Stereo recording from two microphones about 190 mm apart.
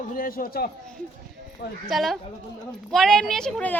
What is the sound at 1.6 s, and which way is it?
Speech, 65° left (ahead or behind).